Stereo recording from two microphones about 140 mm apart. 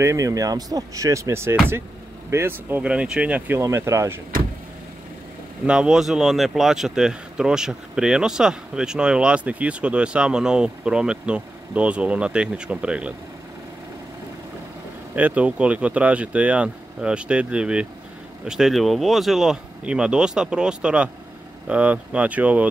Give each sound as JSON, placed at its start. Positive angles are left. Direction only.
{"t": 0.0, "sound": "speech", "side_deg": -25}
{"t": 5.7, "sound": "speech", "side_deg": -5}
{"t": 15.1, "sound": "speech", "side_deg": -10}